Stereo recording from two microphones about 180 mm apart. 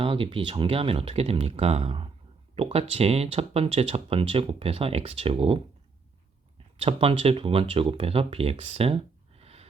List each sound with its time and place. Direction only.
0.0 s speech: 30° right (ahead or behind)
6.8 s speech: 30° right (ahead or behind)